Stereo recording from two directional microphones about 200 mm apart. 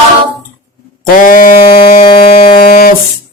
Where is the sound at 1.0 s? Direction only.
45° left (ahead or behind).